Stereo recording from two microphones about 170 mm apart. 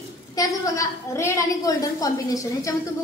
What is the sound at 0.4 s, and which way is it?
A woman's voice, 20° left (ahead or behind).